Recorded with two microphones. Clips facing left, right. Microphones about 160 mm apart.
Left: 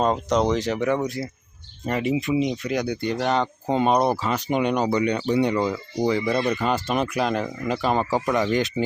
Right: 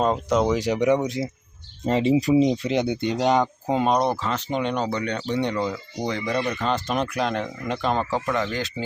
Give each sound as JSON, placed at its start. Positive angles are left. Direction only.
{"t": 0.0, "sound": "speech", "side_deg": -5}
{"t": 3.7, "sound": "speech", "side_deg": 0}